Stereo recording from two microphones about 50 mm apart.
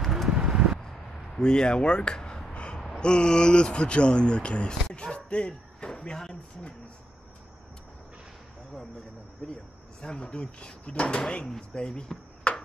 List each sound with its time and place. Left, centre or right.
0.0 s a sound: centre
0.3 s a sound: centre
1.3 s speech: centre
2.5 s gasp: left
3.0 s speech: centre
9.4 s speech: left